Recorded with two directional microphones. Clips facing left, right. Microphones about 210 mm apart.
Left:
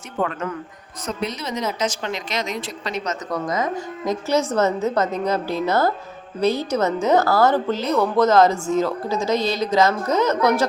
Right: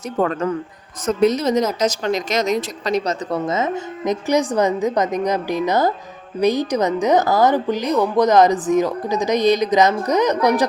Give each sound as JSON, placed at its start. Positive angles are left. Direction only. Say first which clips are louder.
{"t": 0.2, "sound": "a woman's voice", "louder": "right 5 dB", "side_deg": -35}